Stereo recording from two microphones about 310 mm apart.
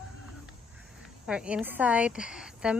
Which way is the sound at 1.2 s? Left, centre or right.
Centre.